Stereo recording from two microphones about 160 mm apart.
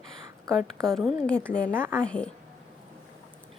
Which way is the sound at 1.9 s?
5° left (ahead or behind).